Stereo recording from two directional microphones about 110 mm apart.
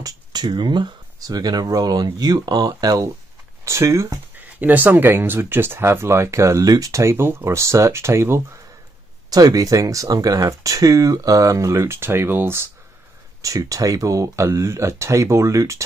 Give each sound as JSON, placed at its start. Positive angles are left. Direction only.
{"t": 0.0, "sound": "speech", "side_deg": -40}
{"t": 4.6, "sound": "speech", "side_deg": -15}
{"t": 9.3, "sound": "speech", "side_deg": -35}
{"t": 13.4, "sound": "speech", "side_deg": -30}